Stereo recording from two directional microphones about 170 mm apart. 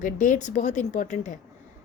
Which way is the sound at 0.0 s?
50° left (ahead or behind).